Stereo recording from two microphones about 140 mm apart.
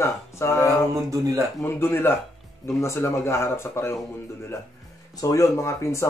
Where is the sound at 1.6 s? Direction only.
15° left (ahead or behind).